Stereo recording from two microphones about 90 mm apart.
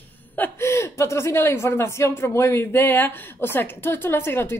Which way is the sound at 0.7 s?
30° left (ahead or behind).